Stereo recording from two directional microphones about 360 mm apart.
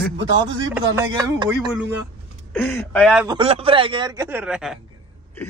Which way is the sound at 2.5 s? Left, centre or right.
Centre.